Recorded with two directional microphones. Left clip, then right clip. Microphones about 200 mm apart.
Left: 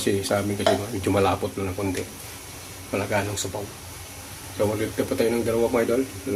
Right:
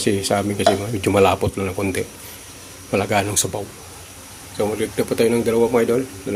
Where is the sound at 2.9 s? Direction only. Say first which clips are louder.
Right 6 dB; 55° right (ahead or behind).